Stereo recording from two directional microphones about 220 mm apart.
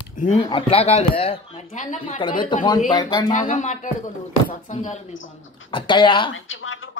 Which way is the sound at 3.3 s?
35° left (ahead or behind).